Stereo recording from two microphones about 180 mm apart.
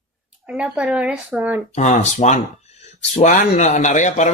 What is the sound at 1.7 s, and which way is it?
Speech, 40° left (ahead or behind).